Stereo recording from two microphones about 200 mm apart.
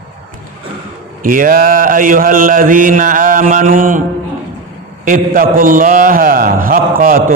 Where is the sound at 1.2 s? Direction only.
45° right (ahead or behind).